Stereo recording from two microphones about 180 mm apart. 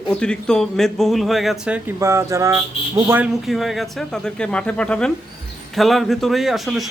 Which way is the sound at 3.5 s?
Centre (ahead or behind).